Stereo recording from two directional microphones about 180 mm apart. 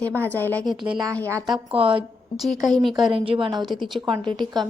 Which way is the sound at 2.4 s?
Centre (ahead or behind).